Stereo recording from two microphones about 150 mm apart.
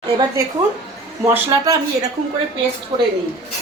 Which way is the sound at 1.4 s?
20° right (ahead or behind).